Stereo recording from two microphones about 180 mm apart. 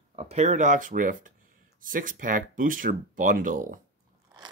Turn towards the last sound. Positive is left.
turn(degrees=-50)  # may be behind; listen again after turning